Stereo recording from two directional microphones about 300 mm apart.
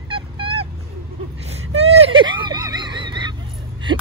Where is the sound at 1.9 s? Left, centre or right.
Centre.